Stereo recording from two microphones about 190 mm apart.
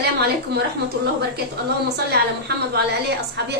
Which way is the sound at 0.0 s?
60° right (ahead or behind).